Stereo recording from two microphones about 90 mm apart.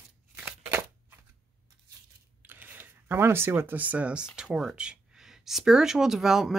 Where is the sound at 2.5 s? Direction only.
20° right (ahead or behind).